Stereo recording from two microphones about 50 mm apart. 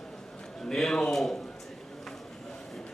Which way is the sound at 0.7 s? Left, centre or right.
Centre.